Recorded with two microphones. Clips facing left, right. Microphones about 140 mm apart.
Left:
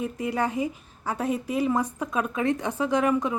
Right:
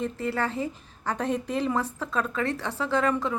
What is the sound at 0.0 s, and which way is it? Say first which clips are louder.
A woman's voice: left 1 dB; 15° left (ahead or behind).